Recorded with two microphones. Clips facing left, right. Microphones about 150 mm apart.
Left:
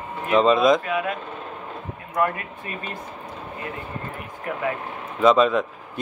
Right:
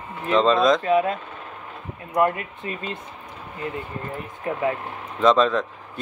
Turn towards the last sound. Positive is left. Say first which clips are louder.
# left 1 dB
turn(degrees=10)  # may be behind; listen again after turning